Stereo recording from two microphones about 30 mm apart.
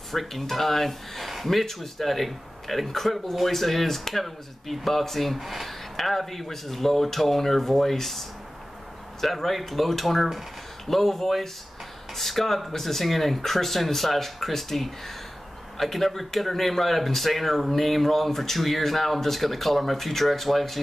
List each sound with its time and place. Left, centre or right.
0.1 s a man's voice: centre